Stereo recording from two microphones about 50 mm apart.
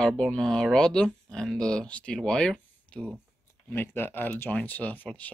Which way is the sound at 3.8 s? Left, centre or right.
Left.